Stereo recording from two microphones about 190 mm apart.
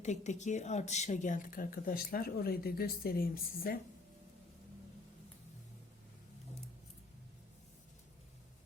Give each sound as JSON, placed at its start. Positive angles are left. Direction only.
{"t": 0.0, "sound": "a woman's voice", "side_deg": 40}